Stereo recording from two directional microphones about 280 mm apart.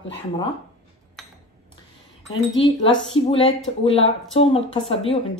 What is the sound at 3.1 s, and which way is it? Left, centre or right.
A woman's voice, centre.